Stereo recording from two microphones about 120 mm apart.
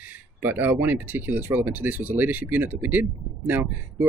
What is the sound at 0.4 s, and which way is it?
Speech, 15° right (ahead or behind).